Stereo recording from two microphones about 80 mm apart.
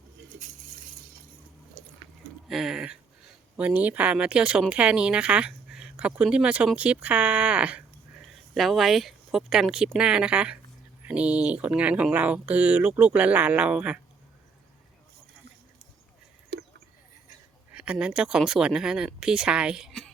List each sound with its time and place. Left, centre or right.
2.5 s speech: centre
8.2 s speech: centre
17.7 s speech: centre